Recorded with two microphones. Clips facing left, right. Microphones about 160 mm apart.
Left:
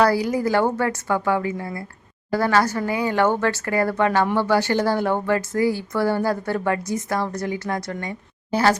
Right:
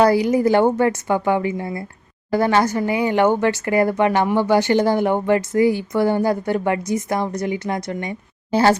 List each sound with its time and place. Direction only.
0.0 s a woman's voice: 20° right (ahead or behind)